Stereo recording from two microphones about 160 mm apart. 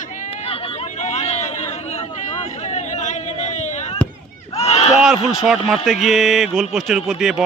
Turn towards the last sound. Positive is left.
turn(degrees=0)  # may be behind; listen again after turning